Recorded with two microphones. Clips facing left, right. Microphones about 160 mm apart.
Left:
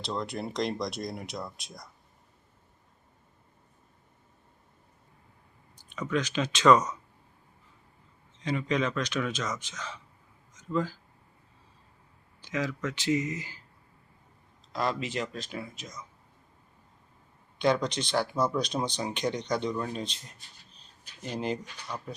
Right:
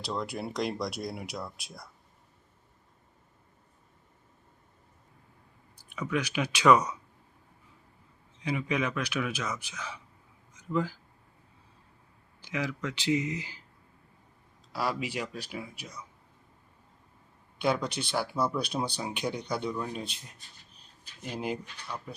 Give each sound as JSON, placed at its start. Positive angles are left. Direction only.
{"t": 0.0, "sound": "speech", "side_deg": -5}
{"t": 5.7, "sound": "speech", "side_deg": -10}
{"t": 8.4, "sound": "speech", "side_deg": -10}
{"t": 10.5, "sound": "a sound", "side_deg": -10}
{"t": 12.5, "sound": "speech", "side_deg": -10}
{"t": 14.7, "sound": "speech", "side_deg": -10}
{"t": 17.6, "sound": "speech", "side_deg": -5}
{"t": 21.2, "sound": "speech", "side_deg": -5}